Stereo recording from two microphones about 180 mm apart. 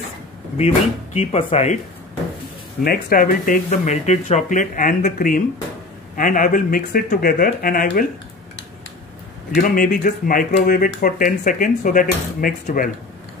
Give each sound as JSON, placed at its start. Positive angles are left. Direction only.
{"t": 0.6, "sound": "speech", "side_deg": 35}
{"t": 2.8, "sound": "speech", "side_deg": 55}
{"t": 10.0, "sound": "speech", "side_deg": 50}